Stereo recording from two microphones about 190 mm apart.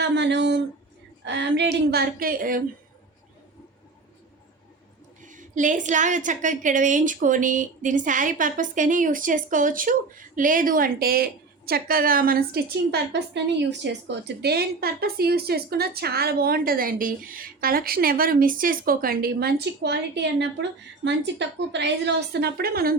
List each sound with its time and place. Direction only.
0.0 s a sound: 65° right (ahead or behind)
1.2 s a woman's voice: 65° right (ahead or behind); by 2.6 s 50° right (ahead or behind)
5.2 s a woman's voice: 40° right (ahead or behind)